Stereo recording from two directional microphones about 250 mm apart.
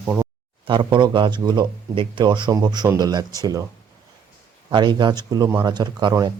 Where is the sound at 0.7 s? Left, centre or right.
Centre.